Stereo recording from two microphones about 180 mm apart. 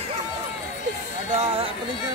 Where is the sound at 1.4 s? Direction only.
35° right (ahead or behind).